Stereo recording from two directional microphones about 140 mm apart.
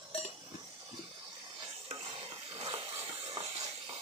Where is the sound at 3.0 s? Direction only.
35° right (ahead or behind).